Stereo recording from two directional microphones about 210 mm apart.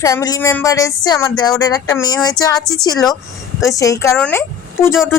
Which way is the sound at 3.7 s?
15° left (ahead or behind).